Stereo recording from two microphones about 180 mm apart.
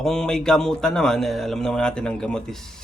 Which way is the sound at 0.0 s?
5° left (ahead or behind).